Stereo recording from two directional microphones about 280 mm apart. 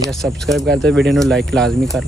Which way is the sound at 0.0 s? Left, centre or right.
Centre.